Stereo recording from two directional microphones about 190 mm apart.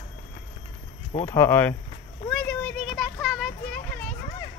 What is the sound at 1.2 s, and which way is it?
Speech, 15° left (ahead or behind).